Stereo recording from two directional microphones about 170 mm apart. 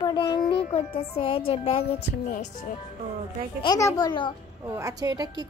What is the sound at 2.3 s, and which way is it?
Speech, 45° left (ahead or behind).